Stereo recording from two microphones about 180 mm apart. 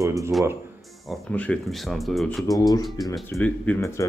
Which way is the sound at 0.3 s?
Centre (ahead or behind).